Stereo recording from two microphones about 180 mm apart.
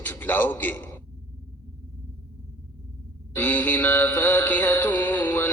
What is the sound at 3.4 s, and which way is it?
A man's voice, 10° left (ahead or behind).